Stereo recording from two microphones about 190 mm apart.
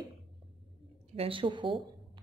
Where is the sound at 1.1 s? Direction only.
30° right (ahead or behind).